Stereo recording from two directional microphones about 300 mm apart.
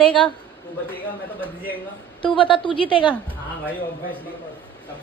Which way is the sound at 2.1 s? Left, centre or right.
Centre.